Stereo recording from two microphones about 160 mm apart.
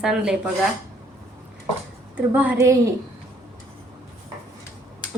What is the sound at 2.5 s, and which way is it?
Speech, 20° right (ahead or behind).